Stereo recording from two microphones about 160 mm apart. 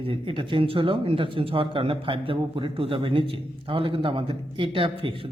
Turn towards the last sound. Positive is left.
turn(degrees=-35)  # may be behind; listen again after turning